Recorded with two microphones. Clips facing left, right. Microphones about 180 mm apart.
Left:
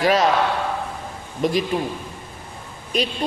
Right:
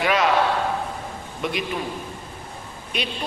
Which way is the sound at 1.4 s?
35° left (ahead or behind).